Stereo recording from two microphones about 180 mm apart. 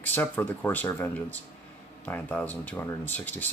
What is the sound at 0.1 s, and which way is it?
Speech, 10° left (ahead or behind).